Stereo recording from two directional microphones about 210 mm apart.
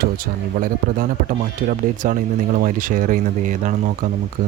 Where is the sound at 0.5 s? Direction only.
40° right (ahead or behind).